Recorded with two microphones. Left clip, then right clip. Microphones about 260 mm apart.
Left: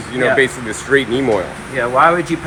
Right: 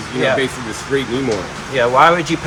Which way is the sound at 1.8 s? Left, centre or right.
Right.